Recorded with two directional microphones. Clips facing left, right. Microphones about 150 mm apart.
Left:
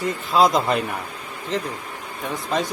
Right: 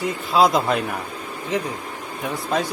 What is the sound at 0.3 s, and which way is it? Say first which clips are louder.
Speech: even; centre (ahead or behind).